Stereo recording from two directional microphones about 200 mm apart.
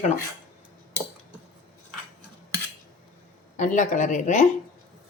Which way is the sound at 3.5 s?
40° left (ahead or behind).